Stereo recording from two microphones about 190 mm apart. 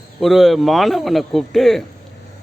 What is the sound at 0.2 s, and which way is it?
A man's voice, centre (ahead or behind).